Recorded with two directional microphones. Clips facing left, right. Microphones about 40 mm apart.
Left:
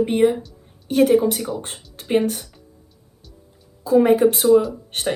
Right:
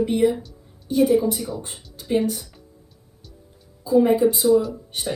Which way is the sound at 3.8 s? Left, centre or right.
Left.